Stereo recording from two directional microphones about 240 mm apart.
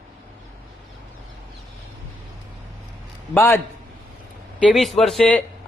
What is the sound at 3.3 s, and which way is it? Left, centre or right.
A man's voice, centre.